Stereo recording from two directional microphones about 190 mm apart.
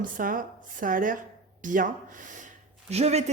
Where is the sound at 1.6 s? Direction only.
45° right (ahead or behind).